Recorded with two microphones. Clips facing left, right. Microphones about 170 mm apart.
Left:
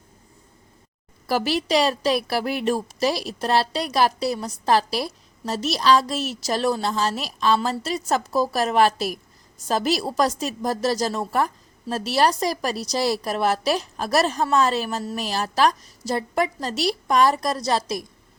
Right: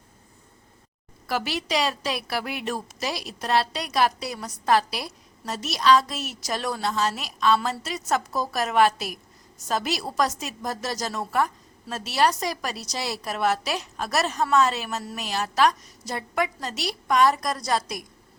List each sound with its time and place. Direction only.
1.3 s a woman's voice: 35° left (ahead or behind)